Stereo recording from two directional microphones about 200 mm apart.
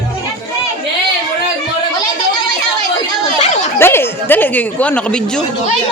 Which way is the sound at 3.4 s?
35° left (ahead or behind).